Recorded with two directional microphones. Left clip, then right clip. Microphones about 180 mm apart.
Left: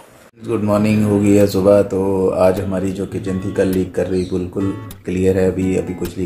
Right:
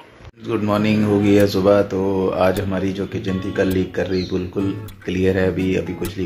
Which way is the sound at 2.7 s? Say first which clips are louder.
Left 2 dB; 10° right (ahead or behind).